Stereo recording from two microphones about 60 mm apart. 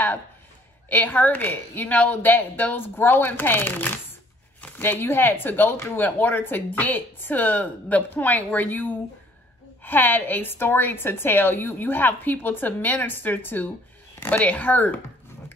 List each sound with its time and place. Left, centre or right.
0.8 s speech: left